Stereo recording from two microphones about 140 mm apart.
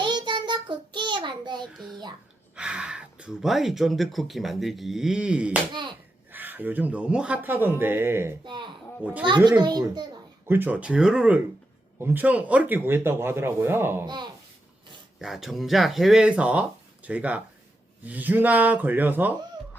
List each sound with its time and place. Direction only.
0.0 s child singing: 35° right (ahead or behind)
1.6 s speech: centre (ahead or behind); by 8.4 s 15° right (ahead or behind)
8.4 s a child's voice: 35° right (ahead or behind)
10.5 s speech: 15° right (ahead or behind)
15.2 s speech: centre (ahead or behind)